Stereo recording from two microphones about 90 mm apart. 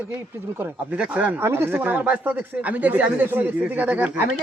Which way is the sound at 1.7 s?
15° right (ahead or behind).